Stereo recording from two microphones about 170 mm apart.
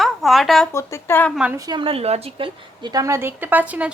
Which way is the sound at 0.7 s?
15° left (ahead or behind).